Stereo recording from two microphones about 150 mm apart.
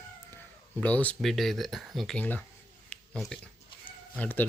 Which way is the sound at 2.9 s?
Centre (ahead or behind).